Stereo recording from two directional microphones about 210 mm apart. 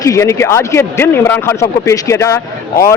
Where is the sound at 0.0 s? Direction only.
15° left (ahead or behind).